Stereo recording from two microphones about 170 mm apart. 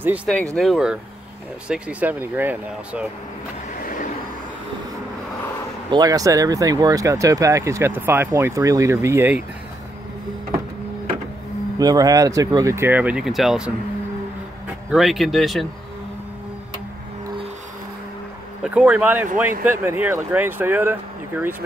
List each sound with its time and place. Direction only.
0.6 s speech: centre (ahead or behind)
3.8 s a sound: 50° left (ahead or behind)
5.9 s speech: 20° right (ahead or behind)
11.8 s speech: 20° right (ahead or behind); by 13.7 s centre (ahead or behind)
14.9 s speech: centre (ahead or behind)
18.6 s speech: 10° right (ahead or behind)